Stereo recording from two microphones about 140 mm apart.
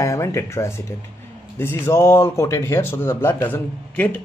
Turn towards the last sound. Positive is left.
turn(degrees=15)  # may be behind; listen again after turning